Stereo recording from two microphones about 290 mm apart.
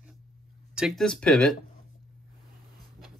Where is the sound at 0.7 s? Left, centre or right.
Centre.